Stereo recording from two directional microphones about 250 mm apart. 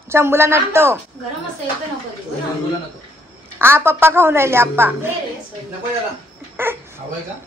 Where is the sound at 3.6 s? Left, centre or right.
Centre.